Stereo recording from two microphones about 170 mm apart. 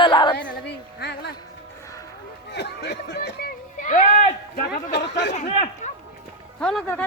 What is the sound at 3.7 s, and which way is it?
Speech, 50° left (ahead or behind).